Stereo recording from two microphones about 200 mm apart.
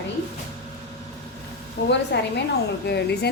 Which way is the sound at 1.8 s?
55° left (ahead or behind).